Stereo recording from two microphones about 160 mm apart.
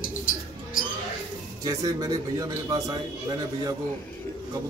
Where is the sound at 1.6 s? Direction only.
25° right (ahead or behind).